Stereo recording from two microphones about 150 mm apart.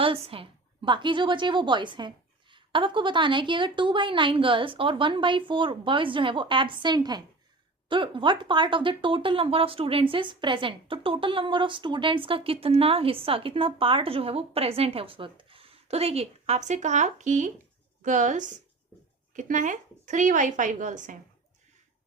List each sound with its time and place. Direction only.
0.0 s a woman's voice: 40° right (ahead or behind); by 21.2 s 60° right (ahead or behind)